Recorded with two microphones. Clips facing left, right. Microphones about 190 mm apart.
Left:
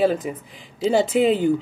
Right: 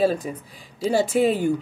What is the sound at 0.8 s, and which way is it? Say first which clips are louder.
Speech: left 2 dB; 20° left (ahead or behind).